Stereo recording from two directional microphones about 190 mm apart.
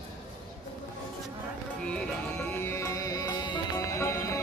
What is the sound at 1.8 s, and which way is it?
Music, 10° left (ahead or behind).